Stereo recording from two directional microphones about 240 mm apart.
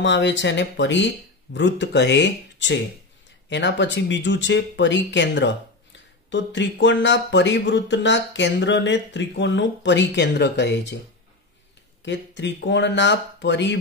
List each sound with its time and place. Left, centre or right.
0.0 s speech: left
12.0 s speech: left